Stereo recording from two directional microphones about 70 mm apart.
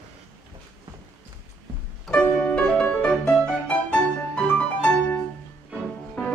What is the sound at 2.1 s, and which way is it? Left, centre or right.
Music, centre.